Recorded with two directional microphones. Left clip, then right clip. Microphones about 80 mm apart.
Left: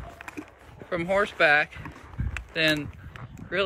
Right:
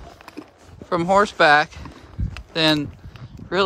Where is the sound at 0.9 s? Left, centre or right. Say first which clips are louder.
Right 8 dB; right.